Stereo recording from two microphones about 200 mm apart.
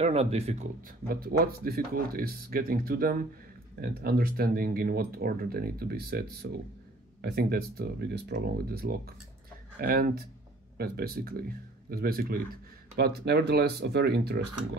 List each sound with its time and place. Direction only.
0.0 s speech: 30° right (ahead or behind)
1.0 s speech: 50° right (ahead or behind)